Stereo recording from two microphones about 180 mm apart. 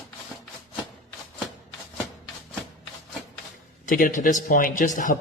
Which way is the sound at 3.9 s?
45° left (ahead or behind).